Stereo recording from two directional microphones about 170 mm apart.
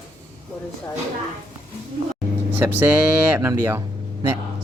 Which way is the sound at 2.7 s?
10° right (ahead or behind).